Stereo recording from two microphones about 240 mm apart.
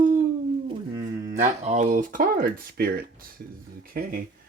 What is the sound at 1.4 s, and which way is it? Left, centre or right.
Speech, right.